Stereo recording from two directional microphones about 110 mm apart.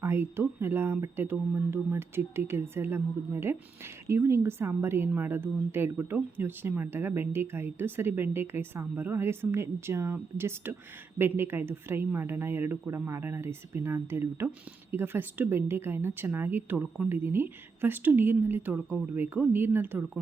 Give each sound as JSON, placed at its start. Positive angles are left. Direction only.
{"t": 0.0, "sound": "a woman's voice", "side_deg": -20}